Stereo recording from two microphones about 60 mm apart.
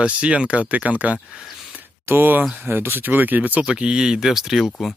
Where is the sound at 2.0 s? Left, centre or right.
Right; by 4.9 s centre.